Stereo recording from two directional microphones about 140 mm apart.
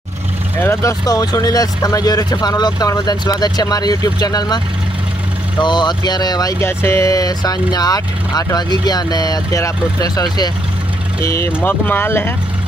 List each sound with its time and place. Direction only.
0.6 s speech: 20° left (ahead or behind)
5.6 s speech: 30° left (ahead or behind)
11.2 s speech: 15° left (ahead or behind)